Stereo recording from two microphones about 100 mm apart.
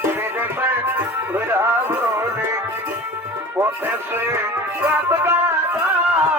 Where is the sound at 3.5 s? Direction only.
20° right (ahead or behind).